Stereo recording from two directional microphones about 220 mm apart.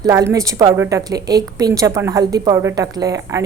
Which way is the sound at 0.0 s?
15° right (ahead or behind).